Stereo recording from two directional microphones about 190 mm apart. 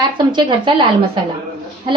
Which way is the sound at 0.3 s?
25° right (ahead or behind).